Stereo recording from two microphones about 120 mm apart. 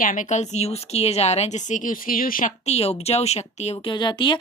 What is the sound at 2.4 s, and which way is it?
Speech, 60° left (ahead or behind).